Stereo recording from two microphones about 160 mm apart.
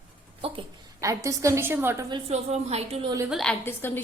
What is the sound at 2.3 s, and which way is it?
Speech, 40° right (ahead or behind).